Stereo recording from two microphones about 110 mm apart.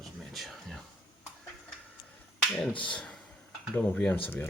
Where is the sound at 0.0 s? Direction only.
Centre (ahead or behind).